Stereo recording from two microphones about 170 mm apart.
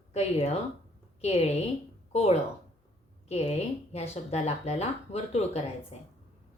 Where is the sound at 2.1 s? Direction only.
40° left (ahead or behind).